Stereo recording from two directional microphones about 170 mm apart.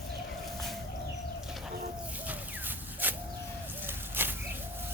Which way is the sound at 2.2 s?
10° right (ahead or behind).